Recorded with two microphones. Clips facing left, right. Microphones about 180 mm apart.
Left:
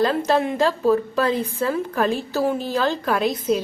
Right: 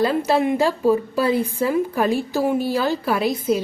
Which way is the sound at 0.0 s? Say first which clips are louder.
Right 1 dB; 10° right (ahead or behind).